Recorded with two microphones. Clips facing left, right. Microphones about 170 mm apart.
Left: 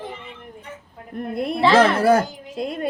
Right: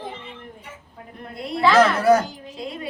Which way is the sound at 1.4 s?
55° left (ahead or behind).